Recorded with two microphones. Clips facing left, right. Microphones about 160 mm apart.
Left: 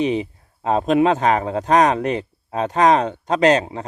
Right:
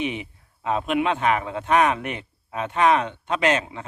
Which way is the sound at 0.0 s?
35° left (ahead or behind).